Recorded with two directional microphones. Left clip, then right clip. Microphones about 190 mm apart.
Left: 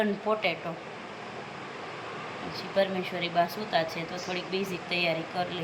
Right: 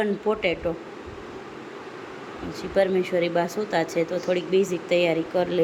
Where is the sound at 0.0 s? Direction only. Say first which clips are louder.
Right 4 dB; 15° right (ahead or behind).